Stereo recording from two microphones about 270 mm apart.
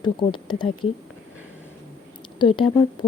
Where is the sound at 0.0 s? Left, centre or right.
Centre.